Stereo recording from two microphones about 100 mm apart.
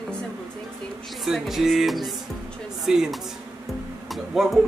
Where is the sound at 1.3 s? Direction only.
5° right (ahead or behind).